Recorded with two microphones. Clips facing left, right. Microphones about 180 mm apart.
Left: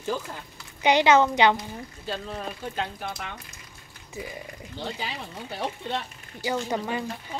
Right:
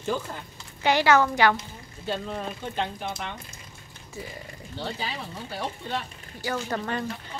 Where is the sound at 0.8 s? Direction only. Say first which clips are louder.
Left 2 dB; 20° left (ahead or behind).